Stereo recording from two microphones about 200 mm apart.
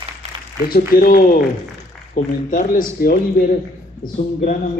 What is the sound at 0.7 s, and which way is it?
A man's voice, 50° left (ahead or behind).